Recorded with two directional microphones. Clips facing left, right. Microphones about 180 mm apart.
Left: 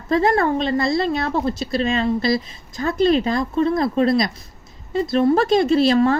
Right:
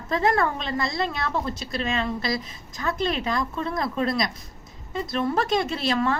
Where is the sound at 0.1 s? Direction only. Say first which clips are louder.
Left 5 dB; 35° left (ahead or behind).